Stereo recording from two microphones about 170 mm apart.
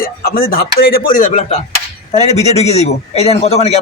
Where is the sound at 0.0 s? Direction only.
60° left (ahead or behind).